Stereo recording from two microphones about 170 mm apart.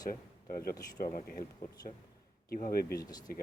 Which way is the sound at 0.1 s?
60° left (ahead or behind).